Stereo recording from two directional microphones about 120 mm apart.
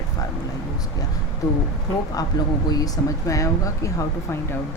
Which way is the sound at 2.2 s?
30° left (ahead or behind).